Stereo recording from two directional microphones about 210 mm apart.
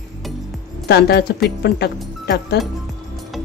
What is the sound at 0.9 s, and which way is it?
Speech, 50° left (ahead or behind).